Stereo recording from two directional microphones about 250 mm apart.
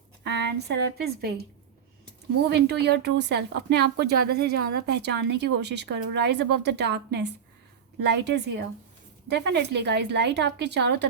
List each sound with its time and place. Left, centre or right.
0.3 s a woman's voice: right
2.5 s speech: right